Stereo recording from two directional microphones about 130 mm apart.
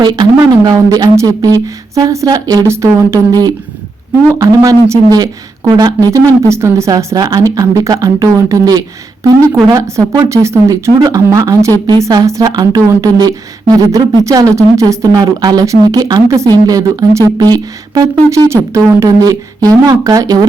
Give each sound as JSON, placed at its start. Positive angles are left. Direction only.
{"t": 0.0, "sound": "a woman's voice", "side_deg": -35}